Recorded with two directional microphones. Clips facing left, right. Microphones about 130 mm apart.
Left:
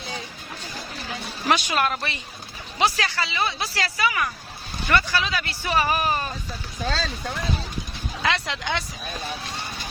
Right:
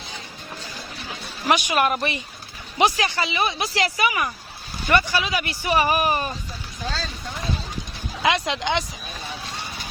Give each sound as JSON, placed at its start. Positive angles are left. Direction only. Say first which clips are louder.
{"t": 1.5, "sound": "speech", "louder": "right 2 dB", "side_deg": -15}
{"t": 8.2, "sound": "speech", "louder": "right 4 dB", "side_deg": -15}